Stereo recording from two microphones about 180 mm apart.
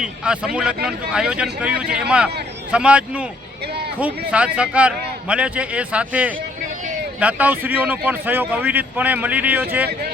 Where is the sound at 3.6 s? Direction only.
65° right (ahead or behind).